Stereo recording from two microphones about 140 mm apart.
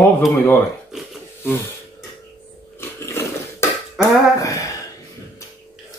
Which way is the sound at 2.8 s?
20° left (ahead or behind).